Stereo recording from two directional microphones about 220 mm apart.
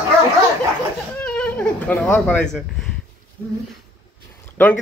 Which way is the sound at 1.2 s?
5° left (ahead or behind).